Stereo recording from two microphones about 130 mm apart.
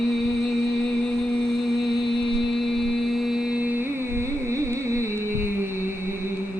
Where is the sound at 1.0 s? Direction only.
5° left (ahead or behind).